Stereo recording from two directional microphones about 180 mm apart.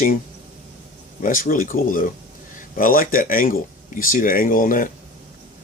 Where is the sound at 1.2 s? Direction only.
50° left (ahead or behind).